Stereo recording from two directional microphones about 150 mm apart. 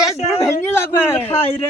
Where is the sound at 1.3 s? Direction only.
40° left (ahead or behind).